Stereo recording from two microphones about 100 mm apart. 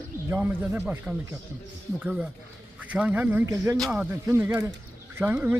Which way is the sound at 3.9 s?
15° right (ahead or behind).